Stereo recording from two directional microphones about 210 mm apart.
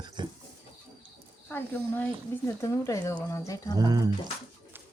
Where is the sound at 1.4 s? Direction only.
10° left (ahead or behind).